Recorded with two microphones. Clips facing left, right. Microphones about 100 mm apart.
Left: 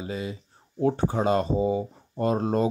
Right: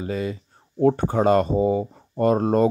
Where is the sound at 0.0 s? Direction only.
55° right (ahead or behind).